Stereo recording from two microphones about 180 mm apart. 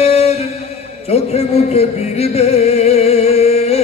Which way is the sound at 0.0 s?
35° left (ahead or behind).